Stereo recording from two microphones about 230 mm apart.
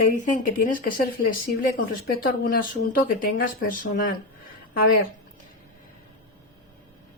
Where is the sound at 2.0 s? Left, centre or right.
Left.